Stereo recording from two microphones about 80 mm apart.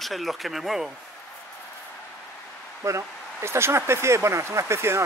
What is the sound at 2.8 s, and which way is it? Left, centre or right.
Speech, right.